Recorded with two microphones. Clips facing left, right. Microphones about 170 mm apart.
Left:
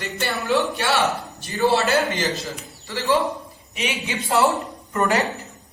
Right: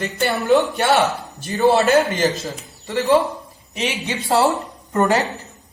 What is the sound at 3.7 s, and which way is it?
Speech, 35° right (ahead or behind).